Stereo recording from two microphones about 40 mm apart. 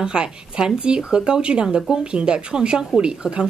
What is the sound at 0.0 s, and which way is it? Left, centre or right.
A woman's voice, right.